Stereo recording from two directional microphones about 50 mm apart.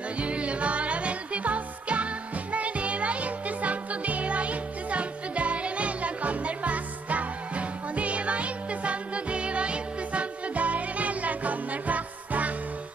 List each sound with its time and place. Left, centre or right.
0.2 s music: right